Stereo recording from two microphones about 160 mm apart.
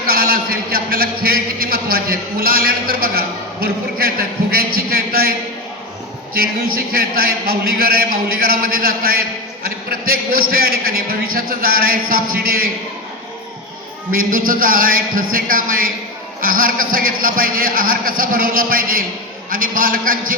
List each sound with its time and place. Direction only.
0.1 s a man's voice: 65° right (ahead or behind)
4.5 s a sound: 65° right (ahead or behind)
6.3 s a man's voice: 65° right (ahead or behind)
14.1 s a man's voice: 60° right (ahead or behind)